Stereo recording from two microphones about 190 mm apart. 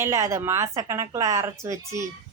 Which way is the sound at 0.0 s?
15° right (ahead or behind).